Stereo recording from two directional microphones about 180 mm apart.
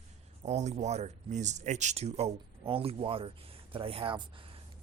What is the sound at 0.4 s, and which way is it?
Speech, 40° right (ahead or behind).